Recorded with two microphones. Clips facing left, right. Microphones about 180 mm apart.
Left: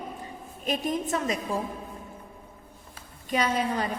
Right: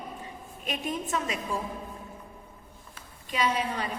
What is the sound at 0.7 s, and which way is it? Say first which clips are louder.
Speech: left 4 dB; 40° left (ahead or behind).